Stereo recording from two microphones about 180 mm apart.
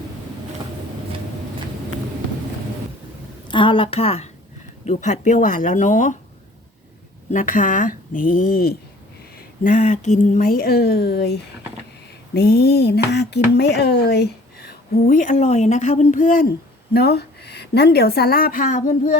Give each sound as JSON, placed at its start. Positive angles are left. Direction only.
{"t": 3.5, "sound": "a woman's voice", "side_deg": 30}
{"t": 7.3, "sound": "speech", "side_deg": 45}
{"t": 9.6, "sound": "a woman's voice", "side_deg": 40}
{"t": 14.7, "sound": "speech", "side_deg": 55}
{"t": 16.9, "sound": "a woman's voice", "side_deg": 65}